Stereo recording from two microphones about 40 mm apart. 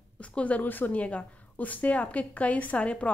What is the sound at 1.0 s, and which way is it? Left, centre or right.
A woman's voice, left.